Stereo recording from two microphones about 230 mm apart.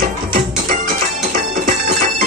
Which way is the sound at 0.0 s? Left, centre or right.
Right.